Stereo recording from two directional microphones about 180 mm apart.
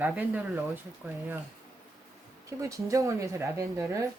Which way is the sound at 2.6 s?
15° right (ahead or behind).